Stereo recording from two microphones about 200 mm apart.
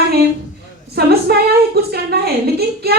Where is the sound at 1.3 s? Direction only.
55° right (ahead or behind).